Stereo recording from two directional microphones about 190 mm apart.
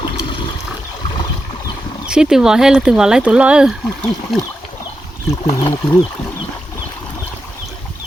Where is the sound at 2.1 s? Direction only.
5° right (ahead or behind).